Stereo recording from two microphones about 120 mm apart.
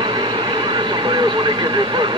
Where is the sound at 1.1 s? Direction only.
40° right (ahead or behind).